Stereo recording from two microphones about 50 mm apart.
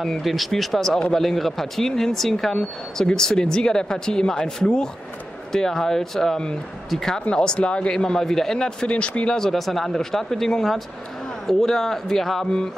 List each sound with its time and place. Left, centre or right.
0.0 s speech: centre; by 9.4 s left
9.4 s speech: centre